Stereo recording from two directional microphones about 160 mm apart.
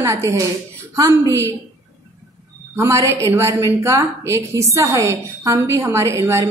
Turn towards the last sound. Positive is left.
turn(degrees=-15)  # may be behind; listen again after turning